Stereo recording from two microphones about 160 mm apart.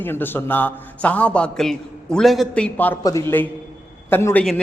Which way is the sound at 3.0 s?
20° left (ahead or behind).